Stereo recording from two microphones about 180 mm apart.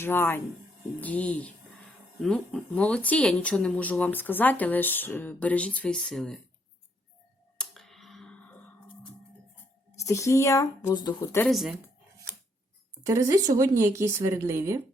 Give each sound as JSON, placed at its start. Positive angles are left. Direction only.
{"t": 0.0, "sound": "speech", "side_deg": 10}
{"t": 7.6, "sound": "music", "side_deg": 0}
{"t": 10.0, "sound": "speech", "side_deg": 15}
{"t": 11.4, "sound": "speech", "side_deg": 0}
{"t": 13.1, "sound": "speech", "side_deg": -20}